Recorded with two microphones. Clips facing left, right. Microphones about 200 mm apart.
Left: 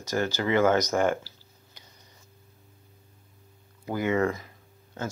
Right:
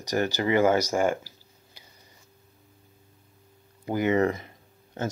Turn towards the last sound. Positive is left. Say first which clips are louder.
# right 3 dB
turn(degrees=-20)  # may be behind; listen again after turning